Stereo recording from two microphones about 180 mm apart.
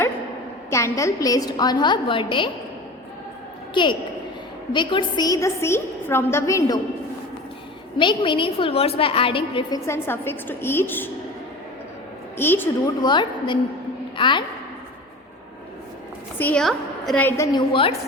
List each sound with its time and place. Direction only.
0.7 s a woman's voice: 15° left (ahead or behind)
3.8 s a woman's voice: 25° left (ahead or behind)
7.9 s a woman's voice: 25° left (ahead or behind); by 11.1 s 10° left (ahead or behind)
12.4 s a woman's voice: 10° left (ahead or behind)
13.0 s a woman's voice: 25° left (ahead or behind)
16.4 s a woman's voice: 5° left (ahead or behind)
17.2 s a woman's voice: 15° left (ahead or behind)
17.7 s a woman's voice: 30° left (ahead or behind)